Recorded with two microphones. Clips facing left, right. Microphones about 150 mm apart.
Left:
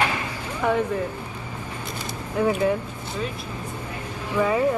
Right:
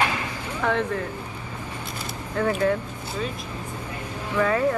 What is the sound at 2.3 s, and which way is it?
Speech, 10° left (ahead or behind).